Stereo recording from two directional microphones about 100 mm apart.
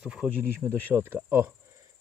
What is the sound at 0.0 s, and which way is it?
Speech, 10° right (ahead or behind).